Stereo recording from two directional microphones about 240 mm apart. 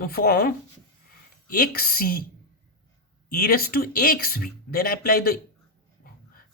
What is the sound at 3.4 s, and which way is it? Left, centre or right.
Speech, left.